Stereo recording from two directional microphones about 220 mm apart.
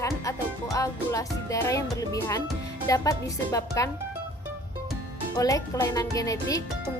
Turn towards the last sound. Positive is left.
turn(degrees=15)  # may be behind; listen again after turning